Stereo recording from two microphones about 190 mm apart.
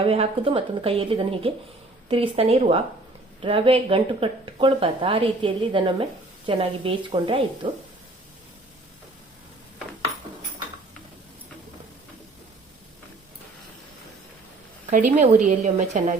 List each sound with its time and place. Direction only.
0.0 s a woman's voice: 30° right (ahead or behind)
15.1 s a woman's voice: 40° right (ahead or behind)